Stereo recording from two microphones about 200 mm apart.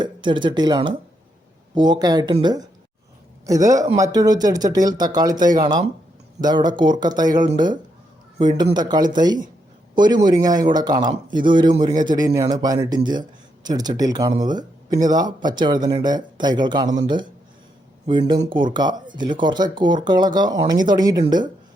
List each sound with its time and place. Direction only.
0.0 s a man's voice: 25° right (ahead or behind)